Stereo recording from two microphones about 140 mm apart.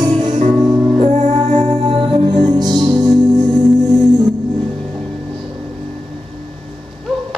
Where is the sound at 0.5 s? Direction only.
30° right (ahead or behind).